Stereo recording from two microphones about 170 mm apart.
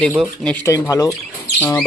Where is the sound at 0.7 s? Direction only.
20° left (ahead or behind).